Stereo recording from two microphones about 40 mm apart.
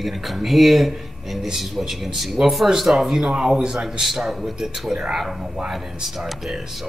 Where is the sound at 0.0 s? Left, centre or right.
Centre.